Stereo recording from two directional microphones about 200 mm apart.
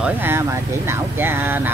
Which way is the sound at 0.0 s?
10° right (ahead or behind).